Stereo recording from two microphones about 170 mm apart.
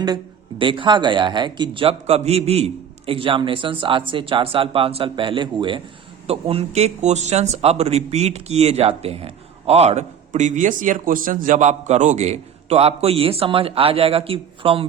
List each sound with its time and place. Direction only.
0.6 s speech: 30° right (ahead or behind)